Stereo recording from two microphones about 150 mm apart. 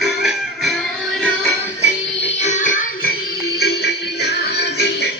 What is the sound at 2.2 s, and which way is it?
Music, 50° left (ahead or behind).